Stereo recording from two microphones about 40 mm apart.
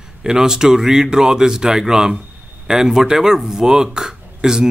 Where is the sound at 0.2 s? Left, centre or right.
Centre.